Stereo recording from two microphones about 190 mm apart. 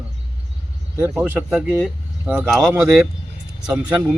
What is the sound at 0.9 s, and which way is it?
A man's voice, 10° right (ahead or behind).